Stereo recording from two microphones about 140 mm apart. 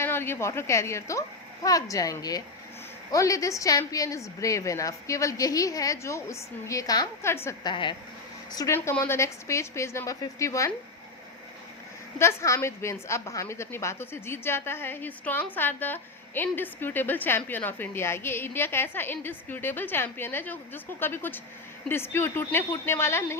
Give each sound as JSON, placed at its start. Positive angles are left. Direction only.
{"t": 0.0, "sound": "a woman's voice", "side_deg": 15}
{"t": 7.6, "sound": "a woman's voice", "side_deg": 35}
{"t": 8.5, "sound": "a woman's voice", "side_deg": 20}
{"t": 12.2, "sound": "a woman's voice", "side_deg": 20}